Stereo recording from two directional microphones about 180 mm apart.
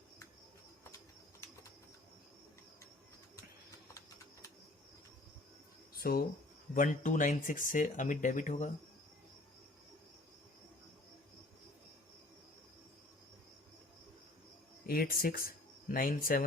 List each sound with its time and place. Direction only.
5.9 s a sound: 55° left (ahead or behind)
6.7 s speech: 45° left (ahead or behind)
14.8 s speech: 55° left (ahead or behind)